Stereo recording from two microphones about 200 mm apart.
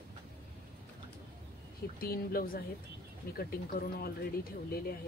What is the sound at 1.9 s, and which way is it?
Speech, 50° left (ahead or behind).